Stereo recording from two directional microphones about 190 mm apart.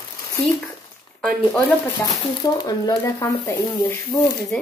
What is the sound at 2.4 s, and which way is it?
Speech, 20° left (ahead or behind).